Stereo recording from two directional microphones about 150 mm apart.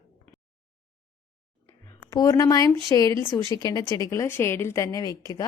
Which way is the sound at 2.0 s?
20° left (ahead or behind).